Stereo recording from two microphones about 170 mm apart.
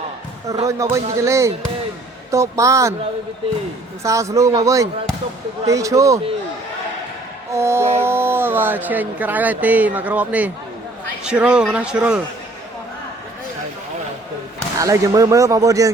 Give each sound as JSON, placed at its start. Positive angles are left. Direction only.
{"t": 0.6, "sound": "speech", "side_deg": -20}
{"t": 4.0, "sound": "speech", "side_deg": -20}
{"t": 7.5, "sound": "a man's voice", "side_deg": -15}
{"t": 14.8, "sound": "speech", "side_deg": -20}